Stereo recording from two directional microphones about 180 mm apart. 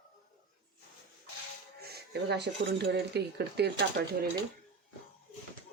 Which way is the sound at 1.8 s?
65° right (ahead or behind).